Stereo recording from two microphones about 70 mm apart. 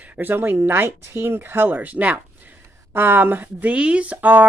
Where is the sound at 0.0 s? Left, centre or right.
Right.